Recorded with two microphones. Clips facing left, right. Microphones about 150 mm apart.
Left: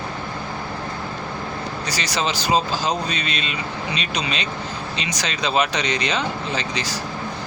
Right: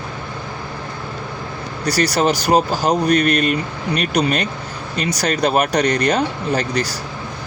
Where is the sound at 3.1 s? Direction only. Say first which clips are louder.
Right 12 dB; 65° right (ahead or behind).